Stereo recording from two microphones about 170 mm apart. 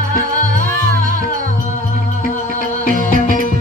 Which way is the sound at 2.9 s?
50° left (ahead or behind).